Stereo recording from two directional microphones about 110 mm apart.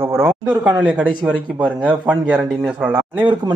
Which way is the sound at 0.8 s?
10° right (ahead or behind).